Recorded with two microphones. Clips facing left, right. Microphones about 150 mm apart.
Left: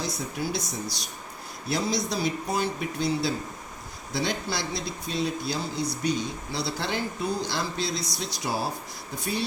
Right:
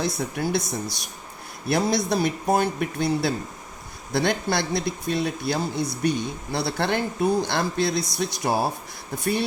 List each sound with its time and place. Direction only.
0.0 s speech: 55° right (ahead or behind)